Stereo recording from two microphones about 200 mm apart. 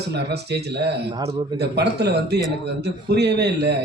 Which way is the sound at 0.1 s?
55° right (ahead or behind).